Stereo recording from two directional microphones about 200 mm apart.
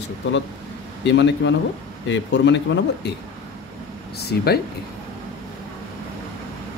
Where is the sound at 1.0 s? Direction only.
65° left (ahead or behind).